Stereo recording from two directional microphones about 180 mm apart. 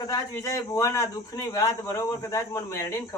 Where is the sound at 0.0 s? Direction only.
15° left (ahead or behind).